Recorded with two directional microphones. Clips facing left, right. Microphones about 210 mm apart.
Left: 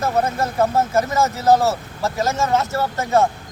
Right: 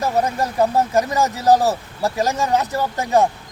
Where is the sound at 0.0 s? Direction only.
15° right (ahead or behind).